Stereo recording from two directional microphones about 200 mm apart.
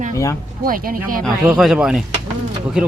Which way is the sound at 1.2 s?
Centre (ahead or behind).